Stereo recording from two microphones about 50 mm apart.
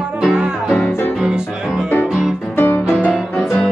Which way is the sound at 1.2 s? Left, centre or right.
Centre.